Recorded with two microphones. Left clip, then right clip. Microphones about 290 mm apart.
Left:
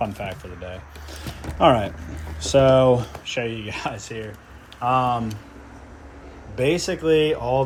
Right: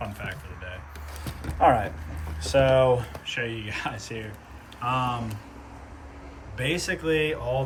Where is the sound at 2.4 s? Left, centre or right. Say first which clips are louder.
Left 5 dB; left.